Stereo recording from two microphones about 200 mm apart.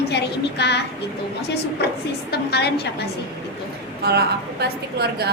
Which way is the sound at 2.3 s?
55° left (ahead or behind).